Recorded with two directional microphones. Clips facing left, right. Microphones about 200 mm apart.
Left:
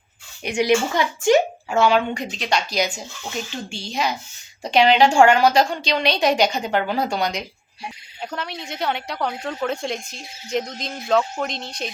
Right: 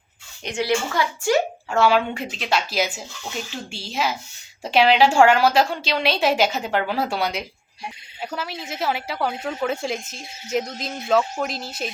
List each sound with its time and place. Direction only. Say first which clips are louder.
0.4 s speech: left 4 dB; 15° left (ahead or behind)
1.7 s a woman's voice: left 1 dB; 5° right (ahead or behind)